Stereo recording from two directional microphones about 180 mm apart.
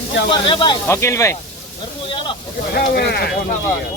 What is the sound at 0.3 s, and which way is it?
Speech, 30° left (ahead or behind).